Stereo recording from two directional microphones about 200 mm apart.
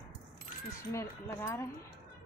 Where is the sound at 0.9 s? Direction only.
15° left (ahead or behind).